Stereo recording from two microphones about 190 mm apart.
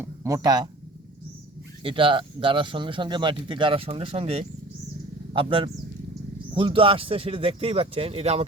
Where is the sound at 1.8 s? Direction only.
25° right (ahead or behind).